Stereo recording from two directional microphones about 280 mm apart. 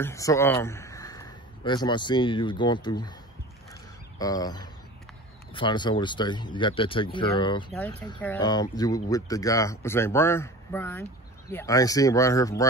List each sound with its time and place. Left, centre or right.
0.0 s a man's voice: centre
4.2 s speech: centre